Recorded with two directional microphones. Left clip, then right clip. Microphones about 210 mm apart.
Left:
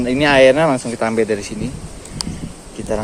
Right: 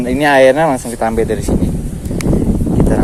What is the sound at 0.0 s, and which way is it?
Speech, 10° right (ahead or behind).